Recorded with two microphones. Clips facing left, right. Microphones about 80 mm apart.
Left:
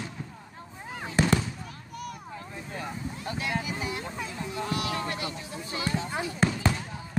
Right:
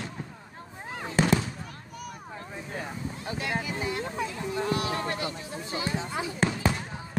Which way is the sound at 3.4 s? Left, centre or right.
Right.